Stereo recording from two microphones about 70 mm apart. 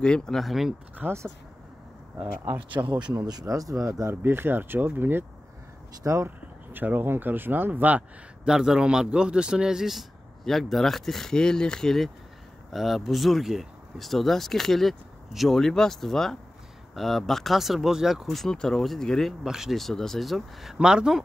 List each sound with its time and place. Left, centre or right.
0.0 s speech: centre
0.4 s speech: centre
1.0 s speech: right
2.4 s speech: right
3.3 s speech: right
4.1 s speech: right
6.2 s speech: right
8.5 s speech: centre
19.4 s speech: centre